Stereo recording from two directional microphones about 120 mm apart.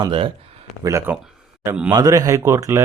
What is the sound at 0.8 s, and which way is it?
Speech, 25° right (ahead or behind).